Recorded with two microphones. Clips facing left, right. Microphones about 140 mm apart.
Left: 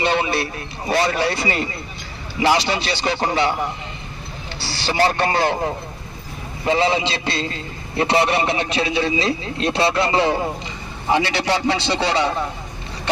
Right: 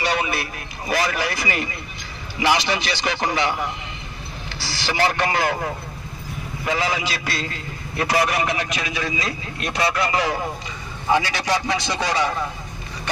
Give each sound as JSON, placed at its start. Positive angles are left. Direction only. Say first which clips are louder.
{"t": 0.0, "sound": "a man's voice", "louder": "left 4 dB", "side_deg": 30}
{"t": 4.9, "sound": "a man's voice", "louder": "left 3 dB", "side_deg": 35}